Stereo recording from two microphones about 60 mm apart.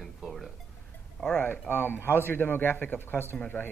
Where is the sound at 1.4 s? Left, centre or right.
Left.